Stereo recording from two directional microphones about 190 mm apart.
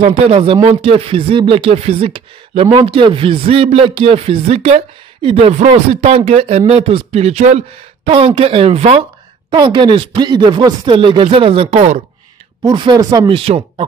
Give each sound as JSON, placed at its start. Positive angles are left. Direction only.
{"t": 0.3, "sound": "speech", "side_deg": -30}
{"t": 12.6, "sound": "speech", "side_deg": -25}